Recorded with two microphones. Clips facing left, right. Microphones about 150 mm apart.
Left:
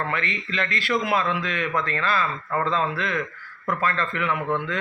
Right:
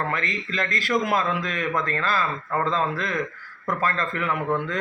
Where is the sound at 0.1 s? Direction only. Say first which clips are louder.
Even; 40° right (ahead or behind).